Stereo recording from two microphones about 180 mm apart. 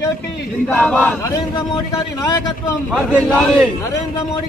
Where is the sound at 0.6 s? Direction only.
5° left (ahead or behind).